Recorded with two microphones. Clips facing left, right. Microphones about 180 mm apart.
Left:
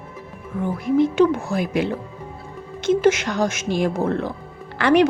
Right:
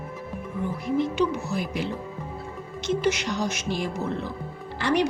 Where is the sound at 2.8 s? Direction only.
50° left (ahead or behind).